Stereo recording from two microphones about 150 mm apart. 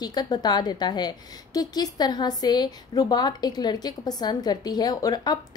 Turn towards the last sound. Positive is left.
turn(degrees=25)  # may be behind; listen again after turning